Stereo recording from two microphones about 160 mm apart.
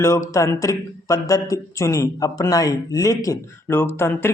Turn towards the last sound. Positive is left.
turn(degrees=15)  # may be behind; listen again after turning